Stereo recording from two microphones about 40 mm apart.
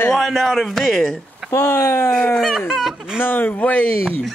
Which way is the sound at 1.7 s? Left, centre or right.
Left.